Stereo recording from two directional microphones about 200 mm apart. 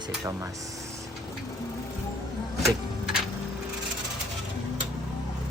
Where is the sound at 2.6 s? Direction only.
Centre (ahead or behind).